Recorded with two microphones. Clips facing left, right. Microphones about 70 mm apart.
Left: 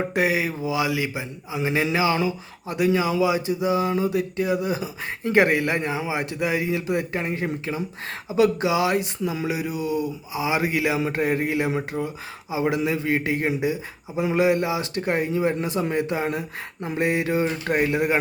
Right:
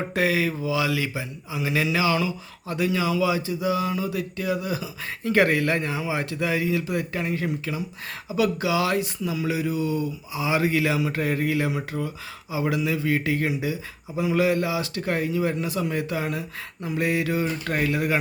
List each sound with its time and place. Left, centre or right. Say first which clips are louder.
0.0 s speech: left 1 dB; left
9.5 s speech: right 1 dB; centre